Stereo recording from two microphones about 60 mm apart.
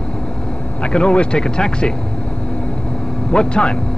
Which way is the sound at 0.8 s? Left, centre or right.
Centre.